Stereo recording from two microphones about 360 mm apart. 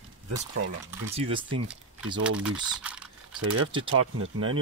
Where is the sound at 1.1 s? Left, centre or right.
Centre.